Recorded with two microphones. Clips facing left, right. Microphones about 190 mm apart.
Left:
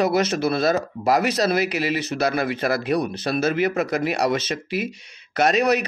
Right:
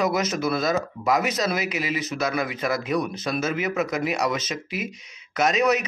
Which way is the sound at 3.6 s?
60° left (ahead or behind).